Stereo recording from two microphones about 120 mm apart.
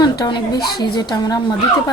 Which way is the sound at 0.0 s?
35° left (ahead or behind).